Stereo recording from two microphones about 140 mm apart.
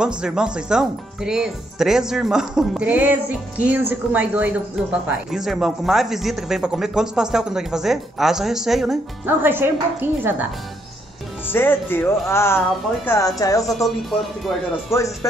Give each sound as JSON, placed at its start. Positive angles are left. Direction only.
{"t": 0.0, "sound": "speech", "side_deg": -5}
{"t": 9.2, "sound": "speech", "side_deg": -15}
{"t": 11.5, "sound": "speech", "side_deg": 15}
{"t": 13.7, "sound": "speech", "side_deg": 0}
{"t": 14.9, "sound": "speech", "side_deg": 20}